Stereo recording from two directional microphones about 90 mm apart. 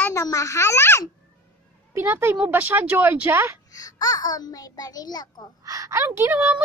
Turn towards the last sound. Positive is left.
turn(degrees=-25)  # may be behind; listen again after turning